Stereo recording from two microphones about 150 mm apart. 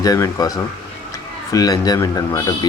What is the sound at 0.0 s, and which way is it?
Speech, 25° left (ahead or behind).